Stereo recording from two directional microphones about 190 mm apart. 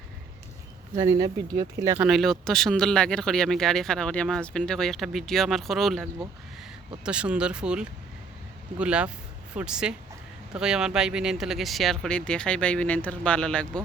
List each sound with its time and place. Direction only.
0.9 s speech: 20° right (ahead or behind)
2.0 s speech: centre (ahead or behind)